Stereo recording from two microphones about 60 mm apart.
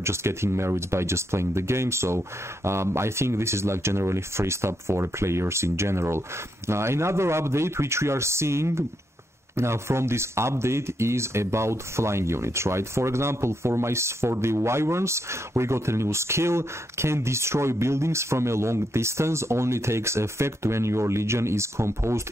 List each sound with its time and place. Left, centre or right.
0.0 s speech: right